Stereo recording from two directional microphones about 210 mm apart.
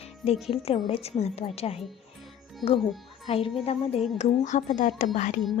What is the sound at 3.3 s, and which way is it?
A woman's voice, 30° left (ahead or behind).